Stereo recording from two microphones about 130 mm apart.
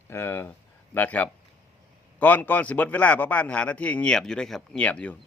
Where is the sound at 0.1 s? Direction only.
20° left (ahead or behind).